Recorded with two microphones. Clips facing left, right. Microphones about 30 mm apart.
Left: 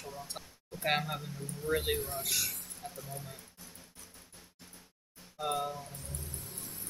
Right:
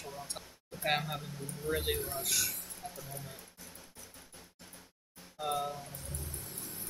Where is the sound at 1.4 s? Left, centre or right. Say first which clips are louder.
Left 1 dB; centre.